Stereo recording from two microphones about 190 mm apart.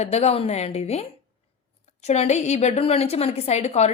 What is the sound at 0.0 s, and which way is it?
A woman's voice, 35° left (ahead or behind).